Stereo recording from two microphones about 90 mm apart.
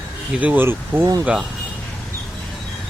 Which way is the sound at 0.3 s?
20° right (ahead or behind).